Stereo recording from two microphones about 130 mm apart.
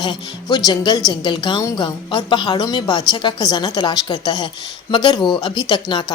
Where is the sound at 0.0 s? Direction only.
35° left (ahead or behind).